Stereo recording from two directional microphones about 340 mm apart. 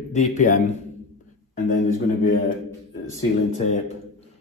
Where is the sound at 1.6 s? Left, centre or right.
Left.